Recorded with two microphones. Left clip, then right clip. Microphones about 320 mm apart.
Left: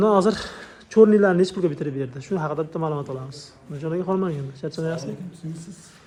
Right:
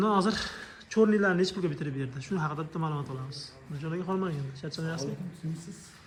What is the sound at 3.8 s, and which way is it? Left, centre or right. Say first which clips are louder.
Speech: left 8 dB; left.